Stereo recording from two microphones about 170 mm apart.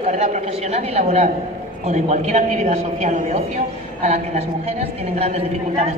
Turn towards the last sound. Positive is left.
turn(degrees=-35)  # may be behind; listen again after turning